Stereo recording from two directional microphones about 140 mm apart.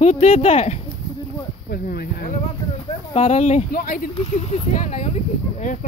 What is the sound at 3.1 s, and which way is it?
Speech, 55° left (ahead or behind).